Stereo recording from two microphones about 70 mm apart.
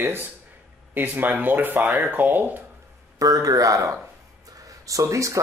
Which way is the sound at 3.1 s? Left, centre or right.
Right.